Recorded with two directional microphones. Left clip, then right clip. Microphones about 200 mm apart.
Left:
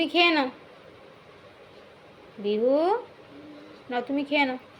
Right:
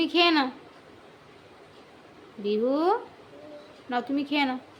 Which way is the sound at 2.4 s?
10° right (ahead or behind).